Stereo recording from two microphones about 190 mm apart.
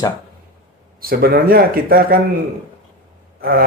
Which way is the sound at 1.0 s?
50° right (ahead or behind).